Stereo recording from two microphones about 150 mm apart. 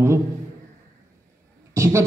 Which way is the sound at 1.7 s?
20° right (ahead or behind).